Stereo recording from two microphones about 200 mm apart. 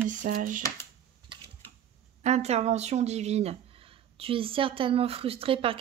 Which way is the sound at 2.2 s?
30° right (ahead or behind).